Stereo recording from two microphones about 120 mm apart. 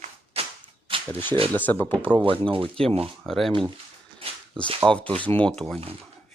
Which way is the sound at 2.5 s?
50° right (ahead or behind).